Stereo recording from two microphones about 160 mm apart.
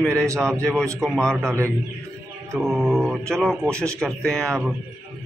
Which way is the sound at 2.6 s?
Centre (ahead or behind).